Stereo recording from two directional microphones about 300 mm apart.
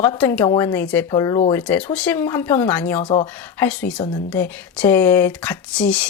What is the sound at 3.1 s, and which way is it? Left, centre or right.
Speech, centre.